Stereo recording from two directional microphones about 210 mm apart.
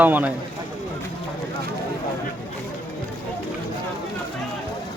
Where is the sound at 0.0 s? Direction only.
10° right (ahead or behind).